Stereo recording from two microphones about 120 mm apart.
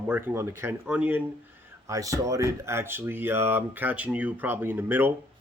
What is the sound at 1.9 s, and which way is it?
Speech, 25° right (ahead or behind).